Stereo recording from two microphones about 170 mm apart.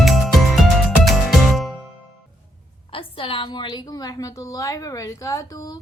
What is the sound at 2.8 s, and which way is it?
A woman's voice, 30° left (ahead or behind).